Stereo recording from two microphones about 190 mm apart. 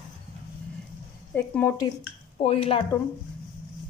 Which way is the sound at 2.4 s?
30° left (ahead or behind).